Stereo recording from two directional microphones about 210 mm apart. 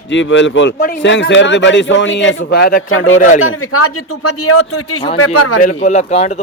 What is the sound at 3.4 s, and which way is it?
Speech, 85° left.